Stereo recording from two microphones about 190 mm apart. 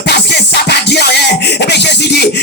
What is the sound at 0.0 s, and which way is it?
Music, 60° left (ahead or behind).